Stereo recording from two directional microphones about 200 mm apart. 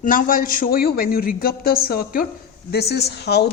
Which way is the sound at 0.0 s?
45° left (ahead or behind).